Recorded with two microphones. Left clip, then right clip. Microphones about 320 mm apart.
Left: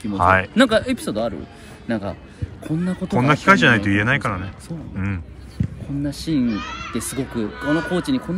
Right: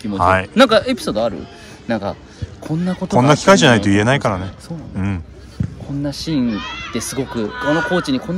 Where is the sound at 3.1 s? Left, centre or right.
Centre.